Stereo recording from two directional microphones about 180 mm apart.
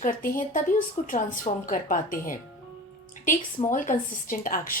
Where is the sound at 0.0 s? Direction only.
50° left (ahead or behind).